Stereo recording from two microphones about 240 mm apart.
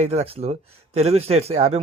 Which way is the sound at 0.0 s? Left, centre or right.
Right.